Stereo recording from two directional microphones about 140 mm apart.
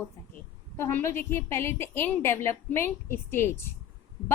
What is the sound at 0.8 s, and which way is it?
A woman's voice, 15° left (ahead or behind).